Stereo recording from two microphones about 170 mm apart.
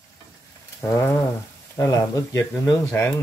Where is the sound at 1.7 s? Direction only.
20° left (ahead or behind).